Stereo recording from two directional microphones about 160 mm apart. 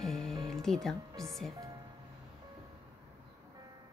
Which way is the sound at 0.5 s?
Centre (ahead or behind).